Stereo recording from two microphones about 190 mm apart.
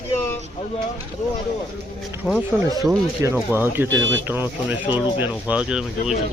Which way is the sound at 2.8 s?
15° right (ahead or behind).